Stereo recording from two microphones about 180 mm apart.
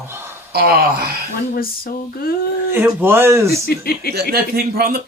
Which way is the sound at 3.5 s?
60° left (ahead or behind).